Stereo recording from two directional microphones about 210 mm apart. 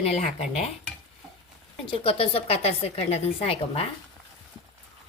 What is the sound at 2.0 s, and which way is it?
A woman's voice, 25° left (ahead or behind).